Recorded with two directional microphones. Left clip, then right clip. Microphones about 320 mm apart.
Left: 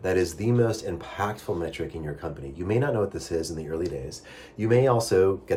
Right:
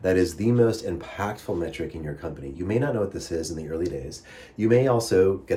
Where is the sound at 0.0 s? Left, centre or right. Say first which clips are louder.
Right 3 dB; centre.